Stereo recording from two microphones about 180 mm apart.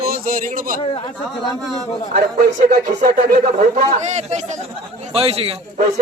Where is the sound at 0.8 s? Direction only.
30° left (ahead or behind).